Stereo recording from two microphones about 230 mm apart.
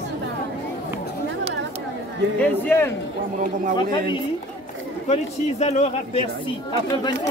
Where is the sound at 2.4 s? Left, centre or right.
Centre.